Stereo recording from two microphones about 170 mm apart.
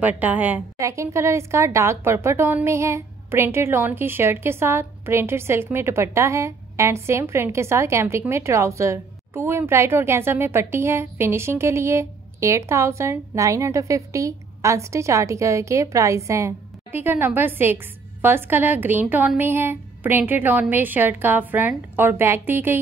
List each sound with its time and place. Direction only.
0.0 s a woman's voice: 10° right (ahead or behind)